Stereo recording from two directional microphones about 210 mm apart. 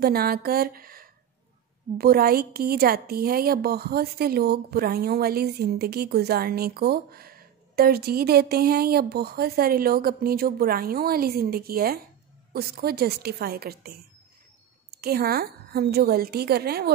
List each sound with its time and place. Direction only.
0.0 s a woman's voice: 45° right (ahead or behind)